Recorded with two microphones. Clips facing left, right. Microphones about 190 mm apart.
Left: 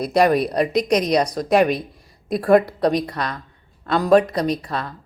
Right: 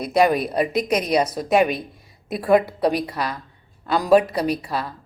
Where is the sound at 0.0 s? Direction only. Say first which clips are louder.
Left 2 dB; centre (ahead or behind).